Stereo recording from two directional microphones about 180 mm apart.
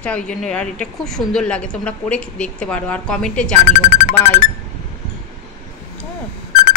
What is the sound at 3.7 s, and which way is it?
Speech, 45° left (ahead or behind).